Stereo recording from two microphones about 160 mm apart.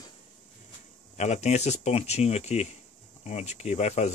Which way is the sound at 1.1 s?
45° left (ahead or behind).